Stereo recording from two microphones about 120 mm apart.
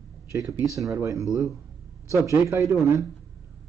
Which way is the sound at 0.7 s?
25° right (ahead or behind).